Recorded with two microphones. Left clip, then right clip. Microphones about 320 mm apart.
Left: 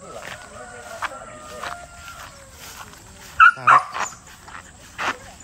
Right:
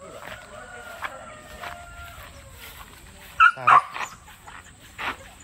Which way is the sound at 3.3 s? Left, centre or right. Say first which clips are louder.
Left 3 dB; centre.